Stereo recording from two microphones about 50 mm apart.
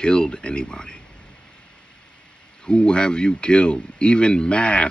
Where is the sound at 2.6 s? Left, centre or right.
Centre.